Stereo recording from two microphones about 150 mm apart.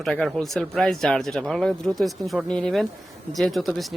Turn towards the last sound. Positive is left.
turn(degrees=0)  # may be behind; listen again after turning